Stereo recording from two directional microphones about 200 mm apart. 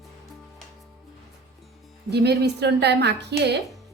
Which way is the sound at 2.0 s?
55° right (ahead or behind).